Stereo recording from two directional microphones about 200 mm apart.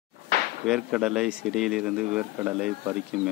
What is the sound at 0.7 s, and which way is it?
Speech, 5° right (ahead or behind).